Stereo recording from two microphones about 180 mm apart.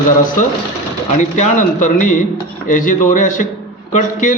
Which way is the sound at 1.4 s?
45° left (ahead or behind).